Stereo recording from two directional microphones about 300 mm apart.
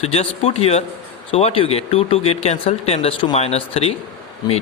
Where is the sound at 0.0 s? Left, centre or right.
Centre.